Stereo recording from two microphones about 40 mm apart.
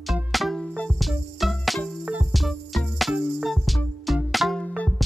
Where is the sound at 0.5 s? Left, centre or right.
Left.